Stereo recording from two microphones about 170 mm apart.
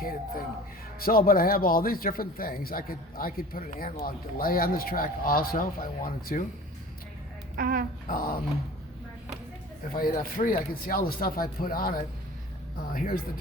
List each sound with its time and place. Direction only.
0.0 s a man's voice: 60° left (ahead or behind)
7.5 s speech: 60° right (ahead or behind)
8.0 s a man's voice: 55° left (ahead or behind)
9.9 s a man's voice: 55° left (ahead or behind)